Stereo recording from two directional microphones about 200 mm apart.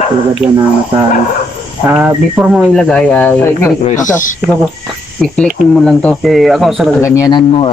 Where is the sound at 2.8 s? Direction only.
5° left (ahead or behind).